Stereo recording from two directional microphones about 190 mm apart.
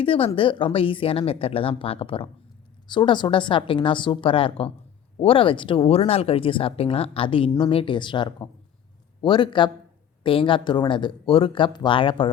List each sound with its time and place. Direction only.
0.0 s speech: 30° left (ahead or behind)